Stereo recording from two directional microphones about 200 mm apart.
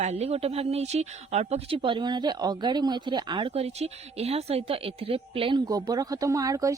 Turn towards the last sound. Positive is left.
turn(degrees=-15)  # may be behind; listen again after turning